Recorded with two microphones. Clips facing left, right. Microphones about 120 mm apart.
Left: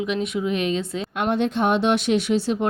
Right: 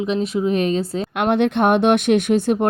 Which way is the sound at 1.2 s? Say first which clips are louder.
Right 4 dB; 65° right (ahead or behind).